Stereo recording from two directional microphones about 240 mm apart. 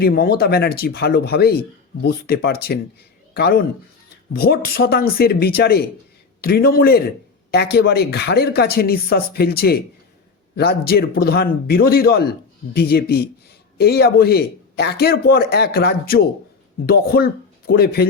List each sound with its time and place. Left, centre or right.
0.0 s speech: left